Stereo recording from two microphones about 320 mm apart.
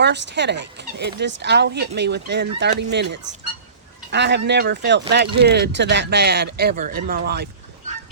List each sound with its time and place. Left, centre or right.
0.0 s speech: right